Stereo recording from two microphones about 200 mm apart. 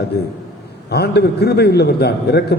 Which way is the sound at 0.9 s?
55° left (ahead or behind).